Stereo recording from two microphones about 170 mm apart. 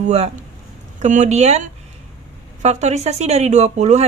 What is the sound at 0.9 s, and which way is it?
Speech, 45° right (ahead or behind).